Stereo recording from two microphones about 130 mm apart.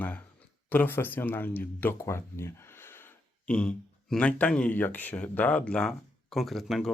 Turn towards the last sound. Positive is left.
turn(degrees=0)  # may be behind; listen again after turning